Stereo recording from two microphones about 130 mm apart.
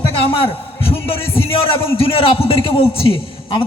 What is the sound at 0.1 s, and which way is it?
A man's voice, 45° left (ahead or behind).